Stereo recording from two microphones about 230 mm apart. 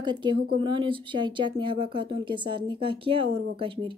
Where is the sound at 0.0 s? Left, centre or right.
Centre.